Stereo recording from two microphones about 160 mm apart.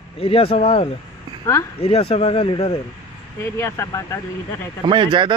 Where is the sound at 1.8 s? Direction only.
35° left (ahead or behind).